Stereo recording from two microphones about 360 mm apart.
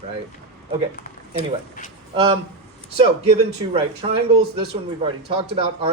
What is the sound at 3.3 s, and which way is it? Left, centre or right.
Speech, centre.